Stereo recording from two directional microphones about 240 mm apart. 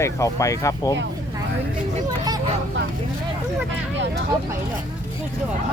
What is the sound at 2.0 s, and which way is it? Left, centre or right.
Hubbub, centre.